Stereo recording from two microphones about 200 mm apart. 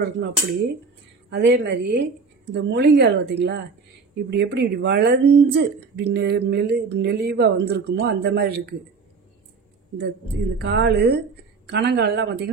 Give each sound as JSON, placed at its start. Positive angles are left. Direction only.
{"t": 0.0, "sound": "speech", "side_deg": -55}
{"t": 9.9, "sound": "speech", "side_deg": -60}